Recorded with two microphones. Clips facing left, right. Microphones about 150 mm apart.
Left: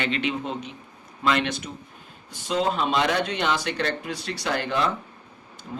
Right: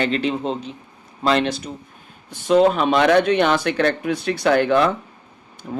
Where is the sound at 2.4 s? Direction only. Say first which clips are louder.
Right 9 dB; 60° right (ahead or behind).